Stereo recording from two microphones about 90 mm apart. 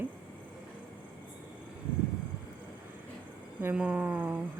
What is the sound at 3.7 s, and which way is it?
Speech, 15° right (ahead or behind).